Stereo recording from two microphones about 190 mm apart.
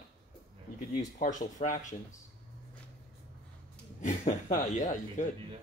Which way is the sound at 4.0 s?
40° left (ahead or behind).